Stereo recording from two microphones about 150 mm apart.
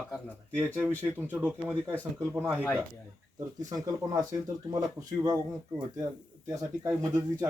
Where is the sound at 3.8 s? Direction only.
25° right (ahead or behind).